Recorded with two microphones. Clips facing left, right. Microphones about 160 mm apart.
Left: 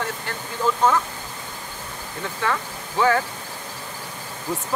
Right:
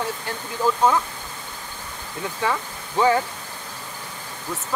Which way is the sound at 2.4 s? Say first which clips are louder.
Even; 15° right (ahead or behind).